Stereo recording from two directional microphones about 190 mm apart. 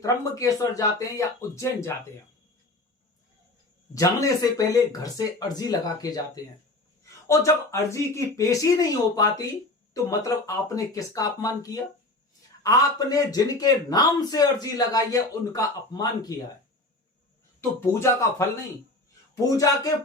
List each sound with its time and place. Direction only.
0.0 s speech: 20° left (ahead or behind)
3.9 s a man's voice: 20° left (ahead or behind)
17.6 s a man's voice: 15° left (ahead or behind)